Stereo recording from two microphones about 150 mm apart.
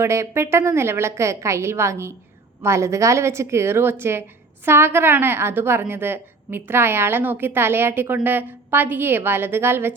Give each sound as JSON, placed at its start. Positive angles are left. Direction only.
{"t": 0.0, "sound": "a woman's voice", "side_deg": -20}